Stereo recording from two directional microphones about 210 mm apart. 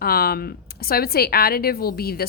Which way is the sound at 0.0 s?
45° left (ahead or behind).